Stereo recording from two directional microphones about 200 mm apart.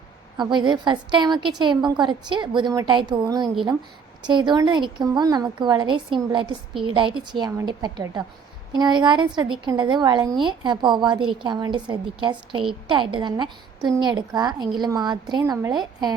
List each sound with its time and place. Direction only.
0.3 s a woman's voice: 25° right (ahead or behind)